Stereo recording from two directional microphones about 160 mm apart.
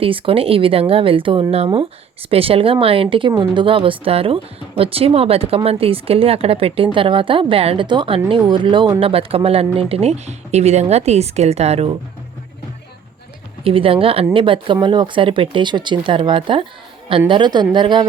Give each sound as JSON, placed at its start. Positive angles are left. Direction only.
{"t": 0.0, "sound": "speech", "side_deg": -35}
{"t": 13.7, "sound": "a woman's voice", "side_deg": -35}